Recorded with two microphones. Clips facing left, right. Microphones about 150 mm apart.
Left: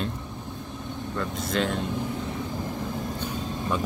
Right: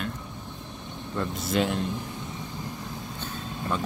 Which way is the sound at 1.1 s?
5° right (ahead or behind).